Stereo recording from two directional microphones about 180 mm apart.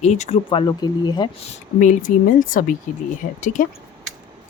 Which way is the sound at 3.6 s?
45° left (ahead or behind).